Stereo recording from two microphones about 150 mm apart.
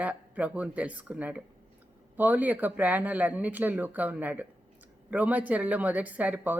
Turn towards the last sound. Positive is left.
turn(degrees=-10)  # may be behind; listen again after turning